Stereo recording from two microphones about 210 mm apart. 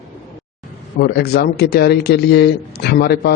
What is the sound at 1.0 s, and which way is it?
Speech, 50° left (ahead or behind).